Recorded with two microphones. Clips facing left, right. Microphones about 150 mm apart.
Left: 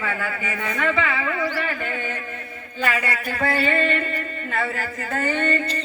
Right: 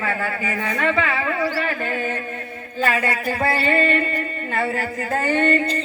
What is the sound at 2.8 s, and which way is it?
Speech, 25° right (ahead or behind).